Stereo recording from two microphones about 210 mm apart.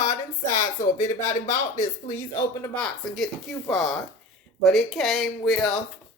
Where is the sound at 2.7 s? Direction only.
Centre (ahead or behind).